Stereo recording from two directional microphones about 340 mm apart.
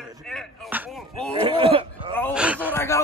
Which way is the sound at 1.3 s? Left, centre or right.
Centre.